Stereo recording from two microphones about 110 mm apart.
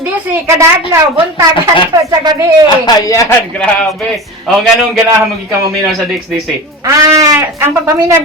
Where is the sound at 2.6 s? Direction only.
35° left (ahead or behind).